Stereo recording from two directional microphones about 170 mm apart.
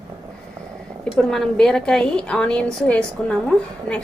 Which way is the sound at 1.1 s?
5° left (ahead or behind).